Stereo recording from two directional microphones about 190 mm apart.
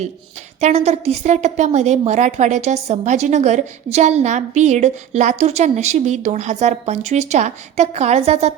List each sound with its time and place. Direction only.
0.6 s a woman's voice: 35° right (ahead or behind)